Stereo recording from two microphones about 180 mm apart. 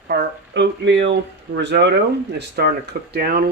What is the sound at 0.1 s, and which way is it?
Speech, 70° right (ahead or behind).